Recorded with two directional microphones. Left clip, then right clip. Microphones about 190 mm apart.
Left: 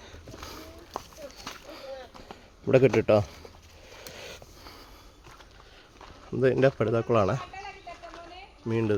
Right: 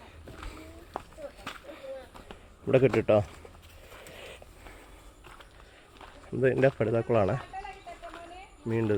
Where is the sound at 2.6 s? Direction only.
20° left (ahead or behind).